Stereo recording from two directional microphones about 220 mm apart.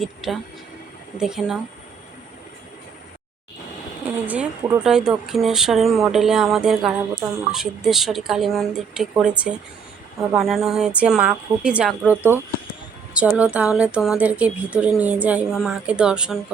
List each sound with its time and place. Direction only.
0.0 s a woman's voice: centre (ahead or behind)
4.0 s a woman's voice: 5° right (ahead or behind)